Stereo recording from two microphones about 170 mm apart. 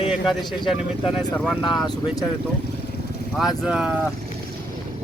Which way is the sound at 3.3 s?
Centre (ahead or behind).